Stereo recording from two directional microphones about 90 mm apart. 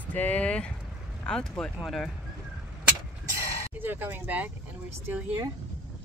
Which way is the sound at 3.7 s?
20° right (ahead or behind).